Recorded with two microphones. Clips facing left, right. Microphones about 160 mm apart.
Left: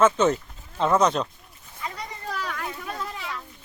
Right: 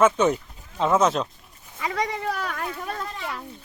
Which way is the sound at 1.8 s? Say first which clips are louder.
Right 8 dB; 90° right.